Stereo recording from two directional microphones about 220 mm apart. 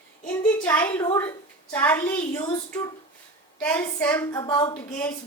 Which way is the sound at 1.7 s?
10° left (ahead or behind).